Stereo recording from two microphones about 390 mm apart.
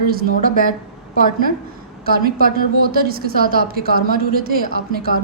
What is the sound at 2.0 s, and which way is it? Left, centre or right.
A woman's voice, right.